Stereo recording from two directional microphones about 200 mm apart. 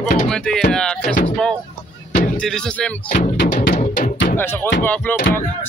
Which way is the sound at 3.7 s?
40° left (ahead or behind).